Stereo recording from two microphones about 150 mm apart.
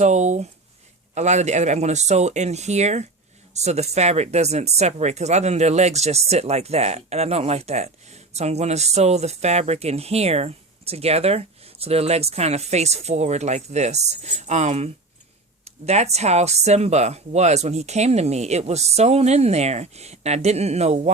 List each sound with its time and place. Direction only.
0.0 s speech: 50° right (ahead or behind)